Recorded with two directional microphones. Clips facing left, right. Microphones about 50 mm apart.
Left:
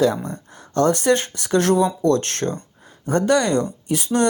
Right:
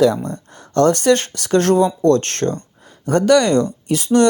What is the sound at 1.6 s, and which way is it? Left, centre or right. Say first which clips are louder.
Speech: right 3 dB; right.